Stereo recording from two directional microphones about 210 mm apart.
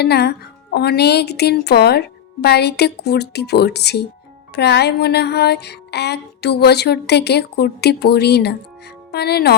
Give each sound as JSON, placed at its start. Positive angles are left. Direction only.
{"t": 0.0, "sound": "speech", "side_deg": 50}